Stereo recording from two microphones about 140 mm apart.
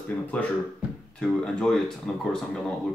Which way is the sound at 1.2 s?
5° left (ahead or behind).